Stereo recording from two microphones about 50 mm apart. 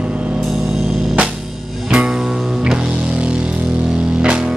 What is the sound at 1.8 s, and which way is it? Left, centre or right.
Music, centre.